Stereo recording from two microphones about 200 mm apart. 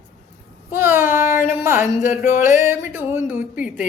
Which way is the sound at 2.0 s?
35° left (ahead or behind).